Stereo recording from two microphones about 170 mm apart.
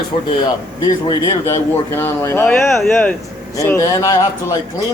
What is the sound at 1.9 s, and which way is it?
Speech, 15° left (ahead or behind).